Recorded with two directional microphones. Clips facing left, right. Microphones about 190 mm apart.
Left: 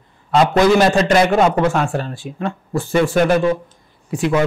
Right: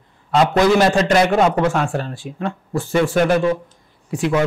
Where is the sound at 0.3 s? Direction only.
20° left (ahead or behind).